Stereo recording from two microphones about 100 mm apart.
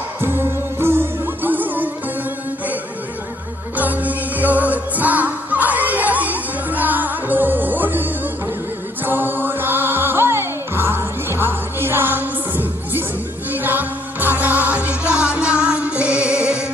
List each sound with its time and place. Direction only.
0.2 s music: 25° right (ahead or behind)
3.8 s music: 15° right (ahead or behind)